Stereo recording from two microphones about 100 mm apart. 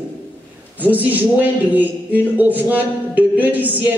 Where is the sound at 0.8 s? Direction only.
15° right (ahead or behind).